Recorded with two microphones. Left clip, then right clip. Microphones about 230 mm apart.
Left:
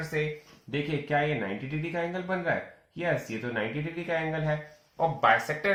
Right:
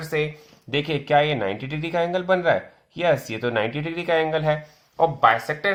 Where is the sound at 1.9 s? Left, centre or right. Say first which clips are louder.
Right 11 dB; right.